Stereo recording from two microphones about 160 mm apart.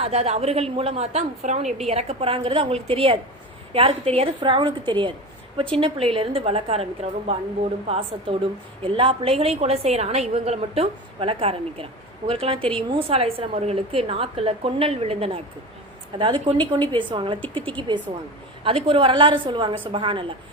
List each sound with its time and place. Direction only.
0.0 s a woman's voice: 40° right (ahead or behind)